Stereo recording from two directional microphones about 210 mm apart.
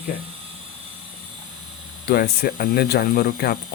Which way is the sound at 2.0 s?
45° left (ahead or behind).